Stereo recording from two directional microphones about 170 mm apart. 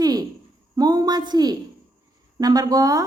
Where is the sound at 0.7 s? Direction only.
20° right (ahead or behind).